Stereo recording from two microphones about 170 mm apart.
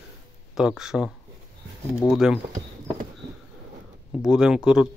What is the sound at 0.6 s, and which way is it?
Speech, 5° right (ahead or behind).